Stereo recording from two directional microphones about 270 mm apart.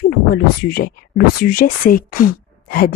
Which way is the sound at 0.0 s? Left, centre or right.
Left.